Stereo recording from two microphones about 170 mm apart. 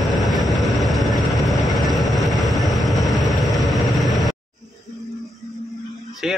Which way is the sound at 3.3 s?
Centre (ahead or behind).